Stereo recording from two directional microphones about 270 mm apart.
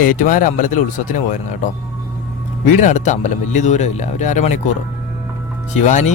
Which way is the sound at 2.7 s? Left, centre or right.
Left.